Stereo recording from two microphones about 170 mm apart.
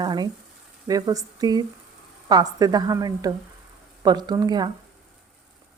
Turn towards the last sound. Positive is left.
turn(degrees=-25)  # may be behind; listen again after turning